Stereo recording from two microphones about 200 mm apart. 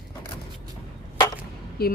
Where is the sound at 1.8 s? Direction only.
50° left (ahead or behind).